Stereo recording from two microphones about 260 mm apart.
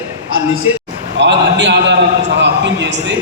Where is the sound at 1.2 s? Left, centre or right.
Right.